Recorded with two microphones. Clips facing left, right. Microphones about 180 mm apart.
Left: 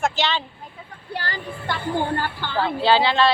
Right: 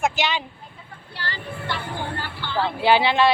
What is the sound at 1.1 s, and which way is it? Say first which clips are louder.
Speech: left 3 dB; 50° left (ahead or behind).